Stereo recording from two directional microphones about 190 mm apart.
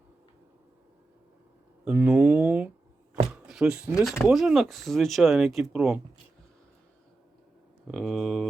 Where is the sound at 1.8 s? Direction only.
5° right (ahead or behind).